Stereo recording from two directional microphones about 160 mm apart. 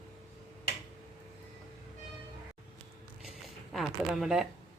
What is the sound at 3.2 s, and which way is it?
Zipper, centre (ahead or behind).